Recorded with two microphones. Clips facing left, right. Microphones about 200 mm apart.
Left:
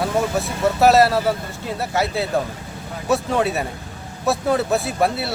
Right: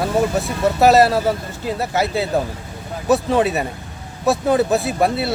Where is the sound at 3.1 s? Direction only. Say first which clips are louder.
Right 3 dB; centre (ahead or behind).